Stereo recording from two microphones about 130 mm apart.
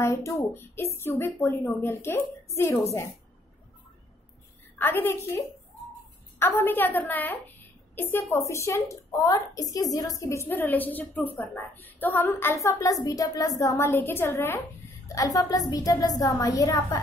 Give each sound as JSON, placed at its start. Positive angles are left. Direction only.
{"t": 0.0, "sound": "a woman's voice", "side_deg": 25}
{"t": 4.7, "sound": "a woman's voice", "side_deg": 15}
{"t": 6.4, "sound": "a woman's voice", "side_deg": 20}